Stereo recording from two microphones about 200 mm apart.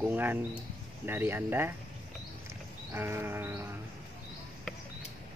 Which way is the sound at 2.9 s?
10° right (ahead or behind).